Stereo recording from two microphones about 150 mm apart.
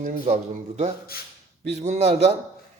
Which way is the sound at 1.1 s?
90° left.